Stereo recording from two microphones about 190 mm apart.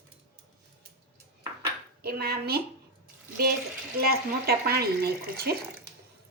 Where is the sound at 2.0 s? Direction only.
55° right (ahead or behind).